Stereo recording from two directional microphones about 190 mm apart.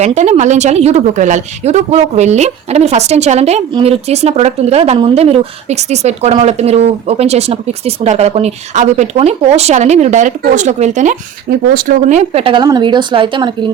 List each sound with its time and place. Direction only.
0.0 s speech: 35° right (ahead or behind)